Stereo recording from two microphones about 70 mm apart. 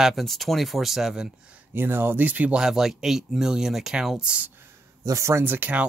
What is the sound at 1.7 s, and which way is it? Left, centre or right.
Speech, right.